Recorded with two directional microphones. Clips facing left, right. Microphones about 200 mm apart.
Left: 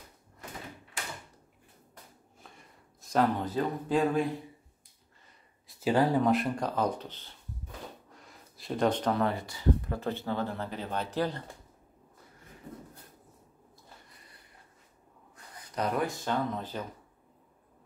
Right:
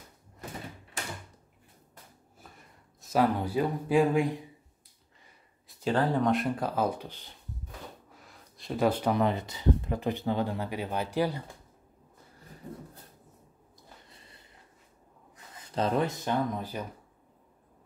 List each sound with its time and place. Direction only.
2.5 s speech: 5° right (ahead or behind)
5.9 s speech: 5° left (ahead or behind); by 7.3 s 15° right (ahead or behind)
8.1 s speech: centre (ahead or behind)
14.1 s a sound: 25° right (ahead or behind)
15.3 s speech: 25° right (ahead or behind)